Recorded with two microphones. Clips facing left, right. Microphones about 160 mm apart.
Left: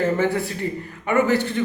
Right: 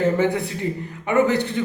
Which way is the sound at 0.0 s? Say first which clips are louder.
Right 1 dB; 15° right (ahead or behind).